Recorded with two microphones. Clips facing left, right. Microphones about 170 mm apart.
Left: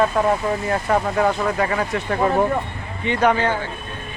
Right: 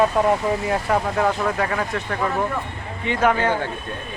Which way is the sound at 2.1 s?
30° left (ahead or behind).